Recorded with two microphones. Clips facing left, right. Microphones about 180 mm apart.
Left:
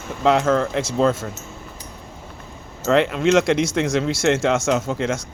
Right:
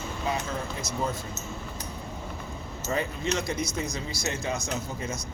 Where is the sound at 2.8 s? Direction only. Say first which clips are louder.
Left 12 dB; 85° left.